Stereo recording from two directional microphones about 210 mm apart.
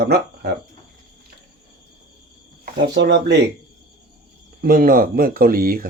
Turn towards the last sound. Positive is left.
turn(degrees=-45)  # may be behind; listen again after turning